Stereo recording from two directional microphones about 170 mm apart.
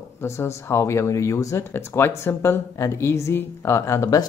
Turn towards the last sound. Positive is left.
turn(degrees=20)  # may be behind; listen again after turning